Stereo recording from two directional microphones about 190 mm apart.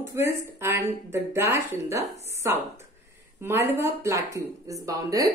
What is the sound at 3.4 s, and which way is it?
A woman's voice, 10° right (ahead or behind).